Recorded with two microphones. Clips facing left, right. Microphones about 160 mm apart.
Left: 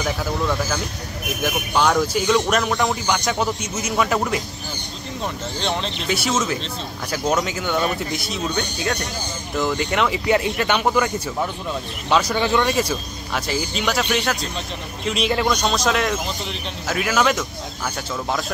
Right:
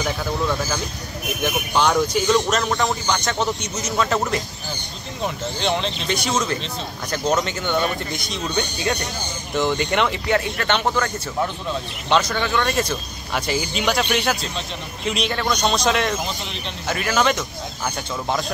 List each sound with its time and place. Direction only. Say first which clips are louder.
0.0 s speech: even; centre (ahead or behind)
5.2 s speech: right 3 dB; centre (ahead or behind)
10.3 s speech: left 2 dB; 10° left (ahead or behind)
12.1 s speech: even; 10° left (ahead or behind)
12.4 s speech: left 3 dB; 20° left (ahead or behind)
12.6 s speech: left 1 dB; 5° left (ahead or behind)